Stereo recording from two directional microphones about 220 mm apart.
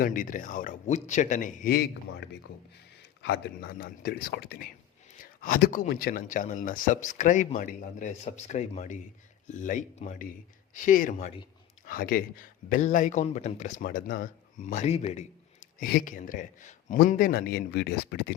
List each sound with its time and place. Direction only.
0.0 s speech: 40° left (ahead or behind)